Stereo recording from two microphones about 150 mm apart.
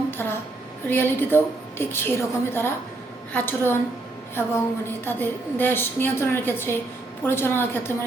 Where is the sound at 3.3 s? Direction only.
15° left (ahead or behind).